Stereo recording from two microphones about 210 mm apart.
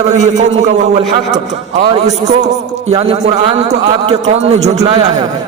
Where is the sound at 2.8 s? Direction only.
30° right (ahead or behind).